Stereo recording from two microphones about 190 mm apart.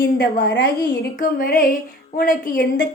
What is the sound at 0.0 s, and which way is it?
A woman's voice, 55° left (ahead or behind).